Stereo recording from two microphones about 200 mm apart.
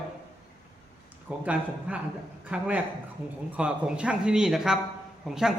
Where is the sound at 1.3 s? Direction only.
5° right (ahead or behind).